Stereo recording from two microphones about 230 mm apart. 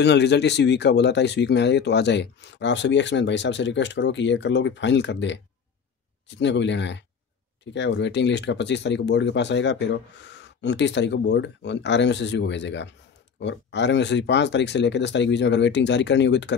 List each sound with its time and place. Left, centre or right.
0.0 s speech: left